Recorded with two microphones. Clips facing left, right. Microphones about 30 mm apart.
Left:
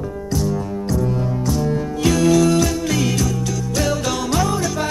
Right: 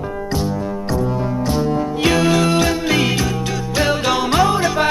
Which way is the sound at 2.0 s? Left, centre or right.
Right.